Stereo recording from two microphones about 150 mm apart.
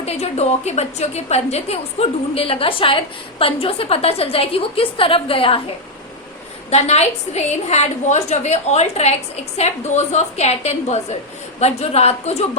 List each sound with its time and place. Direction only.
0.0 s a woman's voice: 45° left (ahead or behind)
6.7 s a woman's voice: 45° left (ahead or behind)